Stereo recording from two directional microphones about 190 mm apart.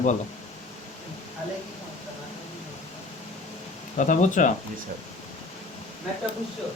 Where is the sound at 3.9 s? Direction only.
40° left (ahead or behind).